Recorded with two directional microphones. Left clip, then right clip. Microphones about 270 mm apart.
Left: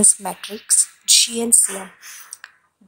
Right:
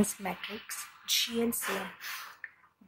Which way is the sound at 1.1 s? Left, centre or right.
Centre.